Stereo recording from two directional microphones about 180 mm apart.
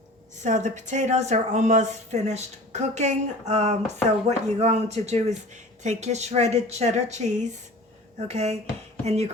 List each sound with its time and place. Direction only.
0.4 s speech: 40° right (ahead or behind)